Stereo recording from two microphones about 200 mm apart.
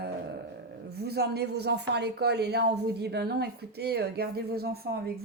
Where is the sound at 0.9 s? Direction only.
55° right (ahead or behind).